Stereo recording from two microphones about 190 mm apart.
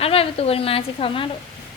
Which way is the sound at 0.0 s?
30° left (ahead or behind).